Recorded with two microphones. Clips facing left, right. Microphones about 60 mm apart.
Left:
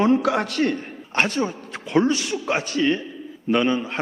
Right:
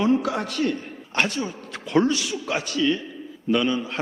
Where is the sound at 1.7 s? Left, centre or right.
Left.